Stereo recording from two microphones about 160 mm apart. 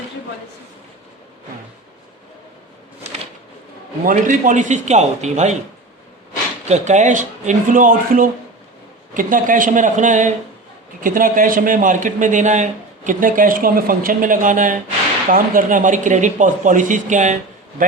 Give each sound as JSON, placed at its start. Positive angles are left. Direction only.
{"t": 4.0, "sound": "speech", "side_deg": -55}
{"t": 6.7, "sound": "speech", "side_deg": -45}